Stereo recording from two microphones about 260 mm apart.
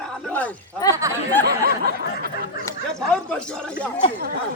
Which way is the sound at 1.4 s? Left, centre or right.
Right.